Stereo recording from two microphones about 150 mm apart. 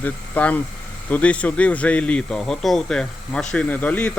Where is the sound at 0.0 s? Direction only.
10° left (ahead or behind).